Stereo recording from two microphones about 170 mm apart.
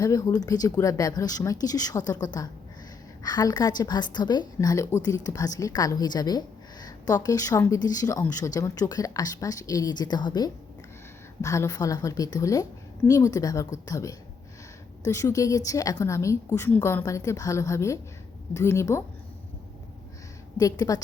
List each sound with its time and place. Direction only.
0.0 s a woman's voice: 20° left (ahead or behind)
20.6 s speech: 20° left (ahead or behind)